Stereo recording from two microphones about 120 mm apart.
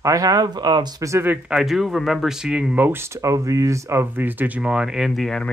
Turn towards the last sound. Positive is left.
turn(degrees=5)  # may be behind; listen again after turning